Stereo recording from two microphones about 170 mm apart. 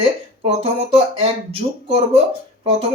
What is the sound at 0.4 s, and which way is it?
Speech, 35° right (ahead or behind).